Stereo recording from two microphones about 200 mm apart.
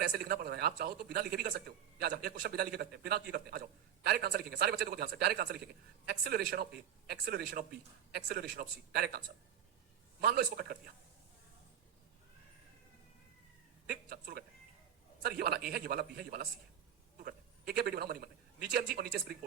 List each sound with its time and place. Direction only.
0.2 s a man's voice: 50° right (ahead or behind)
13.9 s a man's voice: 50° right (ahead or behind)